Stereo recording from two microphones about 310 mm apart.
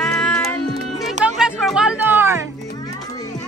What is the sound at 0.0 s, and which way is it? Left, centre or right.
Music, centre.